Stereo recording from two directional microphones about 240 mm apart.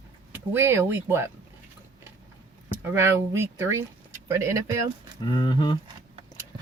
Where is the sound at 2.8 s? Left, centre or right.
Centre.